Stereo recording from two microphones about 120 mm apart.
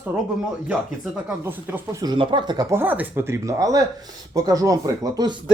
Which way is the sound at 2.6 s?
20° right (ahead or behind).